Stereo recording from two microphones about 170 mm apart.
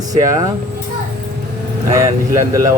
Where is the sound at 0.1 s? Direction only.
20° right (ahead or behind).